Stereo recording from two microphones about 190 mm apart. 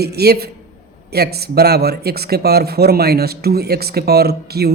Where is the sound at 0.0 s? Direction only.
55° right (ahead or behind).